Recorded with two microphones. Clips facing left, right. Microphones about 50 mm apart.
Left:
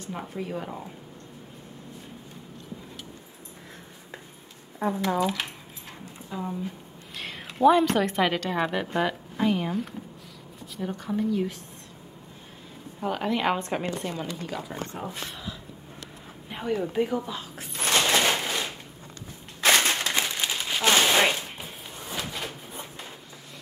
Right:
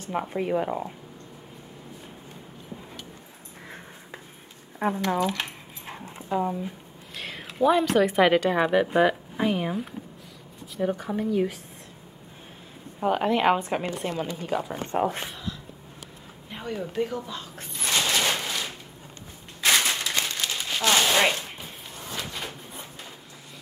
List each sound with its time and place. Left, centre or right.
0.3 s speech: right
4.8 s speech: right
5.2 s speech: centre
5.9 s dog: right
7.2 s a woman's voice: centre
13.0 s a woman's voice: centre
16.4 s speech: centre
17.8 s a sound: left
18.2 s a sound: centre
19.6 s a sound: left
20.1 s crumpling: centre
20.9 s a sound: centre
21.4 s drawer open or close: centre